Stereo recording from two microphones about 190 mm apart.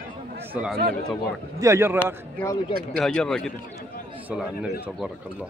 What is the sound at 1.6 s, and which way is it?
Speech, 15° right (ahead or behind).